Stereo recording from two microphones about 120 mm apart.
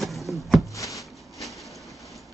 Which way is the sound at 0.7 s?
25° left (ahead or behind).